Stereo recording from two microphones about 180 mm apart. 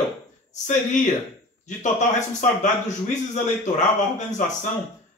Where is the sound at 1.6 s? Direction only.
40° left (ahead or behind).